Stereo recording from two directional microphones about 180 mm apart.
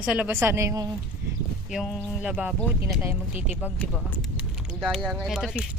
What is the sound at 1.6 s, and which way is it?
A woman's voice, 5° right (ahead or behind).